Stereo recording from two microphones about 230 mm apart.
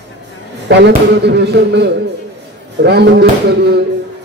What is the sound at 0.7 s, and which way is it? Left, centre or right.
A man's voice, right.